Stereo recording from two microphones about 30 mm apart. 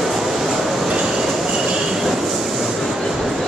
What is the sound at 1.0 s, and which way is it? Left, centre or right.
Train, centre.